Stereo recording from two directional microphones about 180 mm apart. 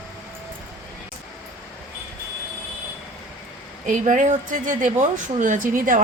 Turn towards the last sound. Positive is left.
turn(degrees=-50)  # may be behind; listen again after turning